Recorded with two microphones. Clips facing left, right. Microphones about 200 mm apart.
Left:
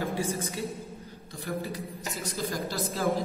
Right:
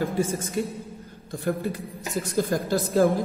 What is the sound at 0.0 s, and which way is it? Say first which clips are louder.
A woman's voice: right 5 dB; 50° right (ahead or behind).